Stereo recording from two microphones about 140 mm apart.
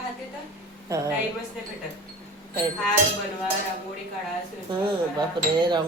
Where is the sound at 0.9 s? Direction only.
20° right (ahead or behind).